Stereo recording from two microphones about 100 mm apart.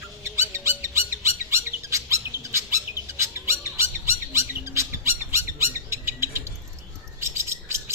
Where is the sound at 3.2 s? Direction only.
25° right (ahead or behind).